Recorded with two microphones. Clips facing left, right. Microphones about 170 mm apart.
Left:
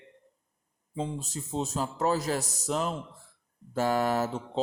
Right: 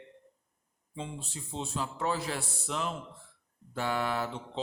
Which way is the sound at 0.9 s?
40° left (ahead or behind).